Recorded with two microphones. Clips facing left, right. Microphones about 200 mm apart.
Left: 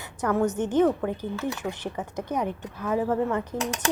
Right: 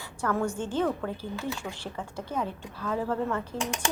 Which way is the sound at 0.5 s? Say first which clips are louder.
Left 6 dB; 20° left (ahead or behind).